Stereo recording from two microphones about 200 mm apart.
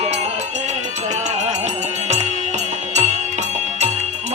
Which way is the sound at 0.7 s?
35° right (ahead or behind).